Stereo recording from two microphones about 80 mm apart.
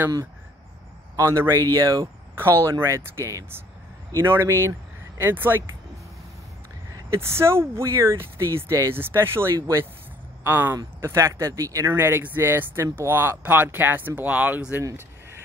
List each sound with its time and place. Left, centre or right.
1.1 s a man's voice: right
2.3 s speech: right
7.1 s speech: right